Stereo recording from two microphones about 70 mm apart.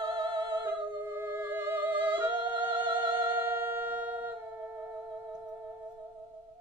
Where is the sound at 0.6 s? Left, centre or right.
Right; by 5.6 s centre.